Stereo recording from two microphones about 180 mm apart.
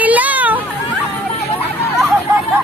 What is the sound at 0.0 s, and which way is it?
Hubbub, 10° right (ahead or behind).